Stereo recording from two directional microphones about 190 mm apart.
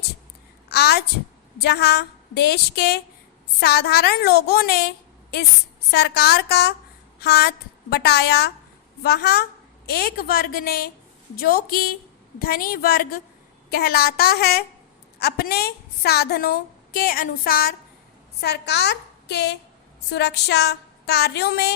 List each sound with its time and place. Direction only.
0.7 s a child's voice: 60° left (ahead or behind)